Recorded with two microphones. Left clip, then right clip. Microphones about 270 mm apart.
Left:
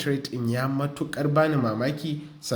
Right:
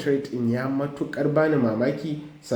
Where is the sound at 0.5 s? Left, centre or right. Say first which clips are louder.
Left 1 dB; left.